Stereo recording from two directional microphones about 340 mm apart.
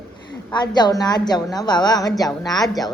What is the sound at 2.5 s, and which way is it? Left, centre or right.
Speech, centre.